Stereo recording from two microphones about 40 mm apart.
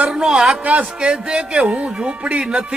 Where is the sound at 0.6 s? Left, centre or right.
Right.